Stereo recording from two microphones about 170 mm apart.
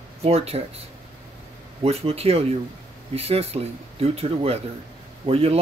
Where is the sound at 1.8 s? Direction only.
35° right (ahead or behind).